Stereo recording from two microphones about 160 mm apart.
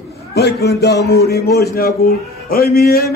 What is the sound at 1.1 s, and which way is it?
A man's voice, 80° left.